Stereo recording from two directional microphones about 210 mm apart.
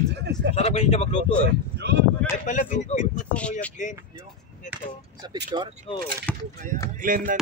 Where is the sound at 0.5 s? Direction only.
30° left (ahead or behind).